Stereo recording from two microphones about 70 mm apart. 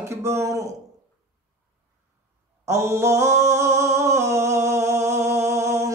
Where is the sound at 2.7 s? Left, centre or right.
Right.